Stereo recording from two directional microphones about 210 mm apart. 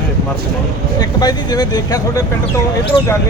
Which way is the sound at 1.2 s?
20° left (ahead or behind).